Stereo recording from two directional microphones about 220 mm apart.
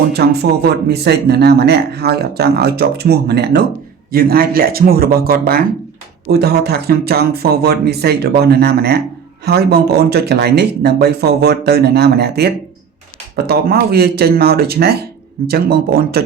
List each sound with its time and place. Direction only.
0.1 s speech: 45° right (ahead or behind)